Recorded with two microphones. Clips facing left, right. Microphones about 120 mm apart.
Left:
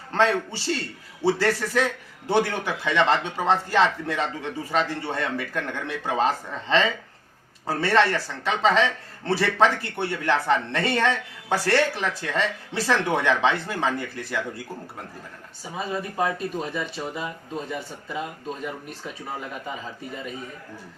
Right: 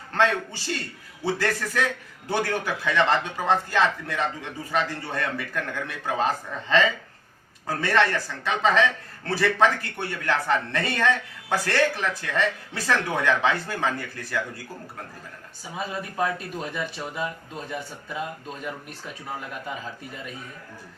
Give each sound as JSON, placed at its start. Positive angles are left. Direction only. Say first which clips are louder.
{"t": 0.1, "sound": "a man's voice", "louder": "left 1 dB", "side_deg": 30}
{"t": 16.1, "sound": "speech", "louder": "left 1 dB", "side_deg": 0}